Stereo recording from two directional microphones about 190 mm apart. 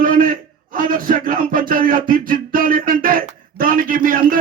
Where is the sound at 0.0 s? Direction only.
45° right (ahead or behind).